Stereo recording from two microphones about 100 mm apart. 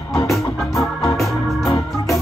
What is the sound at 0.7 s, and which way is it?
Organ, 30° left (ahead or behind).